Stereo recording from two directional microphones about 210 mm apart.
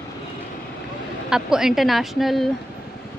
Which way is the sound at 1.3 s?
Centre (ahead or behind).